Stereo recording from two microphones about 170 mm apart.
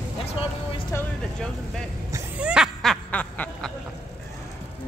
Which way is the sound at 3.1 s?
10° left (ahead or behind).